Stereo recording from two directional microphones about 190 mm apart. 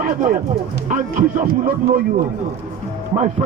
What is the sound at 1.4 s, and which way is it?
Speech, 45° right (ahead or behind).